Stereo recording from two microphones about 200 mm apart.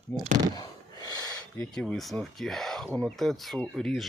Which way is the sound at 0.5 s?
20° left (ahead or behind).